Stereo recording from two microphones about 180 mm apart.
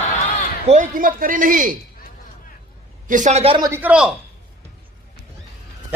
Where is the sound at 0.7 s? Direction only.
45° right (ahead or behind).